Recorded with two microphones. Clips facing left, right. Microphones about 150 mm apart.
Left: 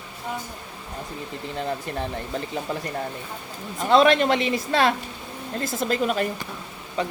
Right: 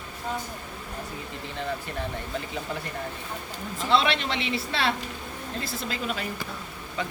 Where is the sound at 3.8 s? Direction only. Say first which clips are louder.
Left 7 dB; 45° left (ahead or behind).